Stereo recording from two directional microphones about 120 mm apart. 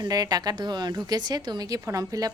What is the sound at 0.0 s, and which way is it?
Speech, 35° right (ahead or behind).